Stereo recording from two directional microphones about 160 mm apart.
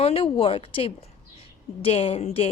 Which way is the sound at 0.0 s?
35° left (ahead or behind).